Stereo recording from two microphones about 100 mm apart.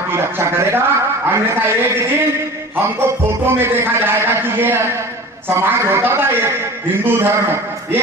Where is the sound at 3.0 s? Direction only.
20° right (ahead or behind).